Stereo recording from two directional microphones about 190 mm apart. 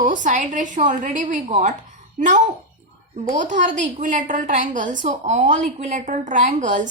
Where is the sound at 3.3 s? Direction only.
40° right (ahead or behind).